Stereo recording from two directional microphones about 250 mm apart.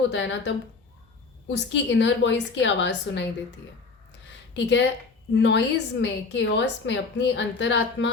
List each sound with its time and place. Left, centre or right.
0.1 s a woman's voice: left
4.5 s a woman's voice: left